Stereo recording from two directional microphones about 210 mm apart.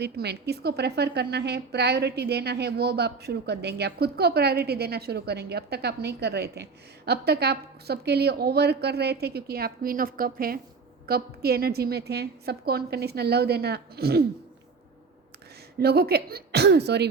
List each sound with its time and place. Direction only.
0.0 s a woman's voice: 50° right (ahead or behind)
15.8 s a woman's voice: 50° right (ahead or behind)